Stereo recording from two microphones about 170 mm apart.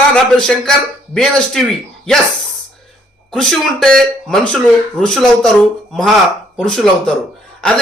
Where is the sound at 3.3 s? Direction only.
5° left (ahead or behind).